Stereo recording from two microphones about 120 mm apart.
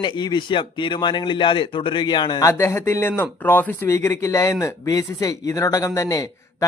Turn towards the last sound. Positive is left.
turn(degrees=30)  # may be behind; listen again after turning